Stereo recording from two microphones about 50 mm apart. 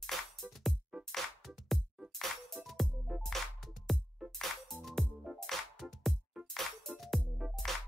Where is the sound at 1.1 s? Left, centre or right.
Centre.